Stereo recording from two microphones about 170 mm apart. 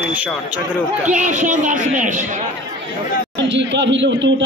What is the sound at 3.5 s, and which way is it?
Speech, 90° right.